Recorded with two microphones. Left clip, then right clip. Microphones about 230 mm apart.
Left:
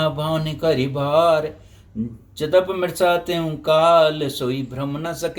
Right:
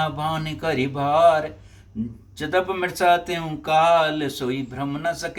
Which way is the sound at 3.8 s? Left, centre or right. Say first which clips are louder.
Left 3 dB; centre.